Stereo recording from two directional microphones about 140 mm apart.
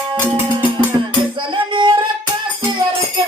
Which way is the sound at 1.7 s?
35° right (ahead or behind).